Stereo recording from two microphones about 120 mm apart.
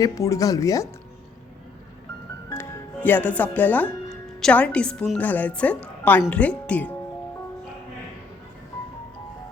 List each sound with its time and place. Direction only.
0.0 s speech: 30° left (ahead or behind)
2.5 s music: 20° left (ahead or behind)
4.4 s speech: 5° left (ahead or behind)